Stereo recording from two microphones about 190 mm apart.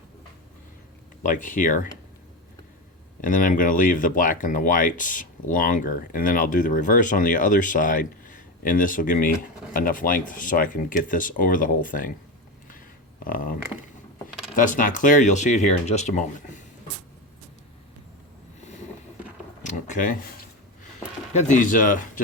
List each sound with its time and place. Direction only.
1.2 s speech: 45° left (ahead or behind)
3.2 s speech: 45° left (ahead or behind)
13.2 s speech: 50° left (ahead or behind)
19.6 s a sound: 40° left (ahead or behind)
21.3 s speech: 40° left (ahead or behind)